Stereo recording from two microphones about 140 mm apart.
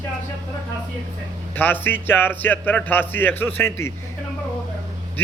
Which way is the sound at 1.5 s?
15° left (ahead or behind).